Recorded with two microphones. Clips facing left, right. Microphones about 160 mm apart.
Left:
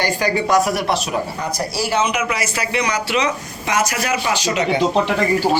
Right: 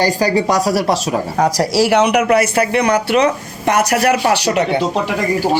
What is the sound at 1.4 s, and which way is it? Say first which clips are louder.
Speech: right 9 dB; 90° right.